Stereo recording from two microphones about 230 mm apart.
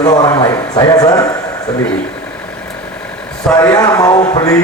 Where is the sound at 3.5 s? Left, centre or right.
Centre.